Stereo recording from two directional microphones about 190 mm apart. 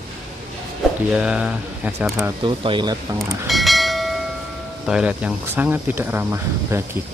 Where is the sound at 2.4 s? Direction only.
25° right (ahead or behind).